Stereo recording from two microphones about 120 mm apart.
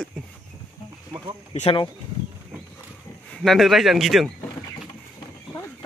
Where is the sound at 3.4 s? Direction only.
Centre (ahead or behind).